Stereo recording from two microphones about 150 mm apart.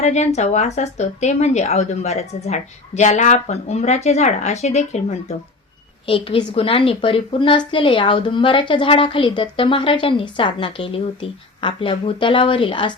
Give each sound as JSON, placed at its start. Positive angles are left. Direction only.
{"t": 0.0, "sound": "speech", "side_deg": 45}
{"t": 6.1, "sound": "a woman's voice", "side_deg": 40}